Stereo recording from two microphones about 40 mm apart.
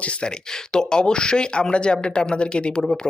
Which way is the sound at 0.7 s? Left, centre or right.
Centre.